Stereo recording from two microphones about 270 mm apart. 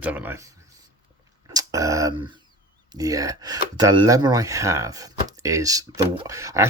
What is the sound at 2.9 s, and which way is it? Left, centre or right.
Speech, centre.